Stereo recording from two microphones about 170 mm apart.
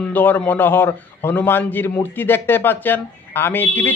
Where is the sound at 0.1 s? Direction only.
10° left (ahead or behind).